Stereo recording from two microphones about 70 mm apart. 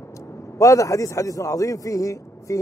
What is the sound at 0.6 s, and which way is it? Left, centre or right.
A man's voice, left.